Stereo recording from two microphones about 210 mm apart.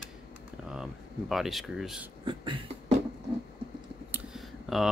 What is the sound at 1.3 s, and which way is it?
Speech, centre (ahead or behind).